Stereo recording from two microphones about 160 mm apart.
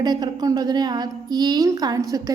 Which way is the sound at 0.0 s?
25° right (ahead or behind).